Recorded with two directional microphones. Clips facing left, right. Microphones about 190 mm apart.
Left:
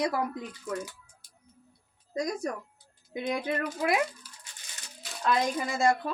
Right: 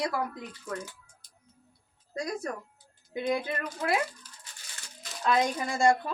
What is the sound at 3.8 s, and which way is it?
Speech, 15° left (ahead or behind).